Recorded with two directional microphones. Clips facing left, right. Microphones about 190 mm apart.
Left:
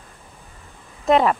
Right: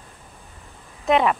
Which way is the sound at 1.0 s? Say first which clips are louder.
Left 2 dB; 35° left (ahead or behind).